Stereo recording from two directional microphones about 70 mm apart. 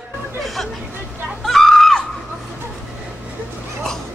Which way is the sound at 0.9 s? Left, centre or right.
Right.